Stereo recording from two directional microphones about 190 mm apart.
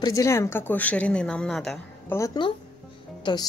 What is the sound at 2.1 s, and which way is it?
Speech, 20° left (ahead or behind).